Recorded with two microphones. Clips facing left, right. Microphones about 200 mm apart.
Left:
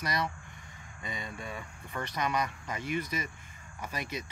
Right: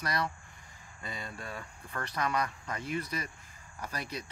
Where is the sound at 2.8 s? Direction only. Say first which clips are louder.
Left 2 dB; 30° right (ahead or behind).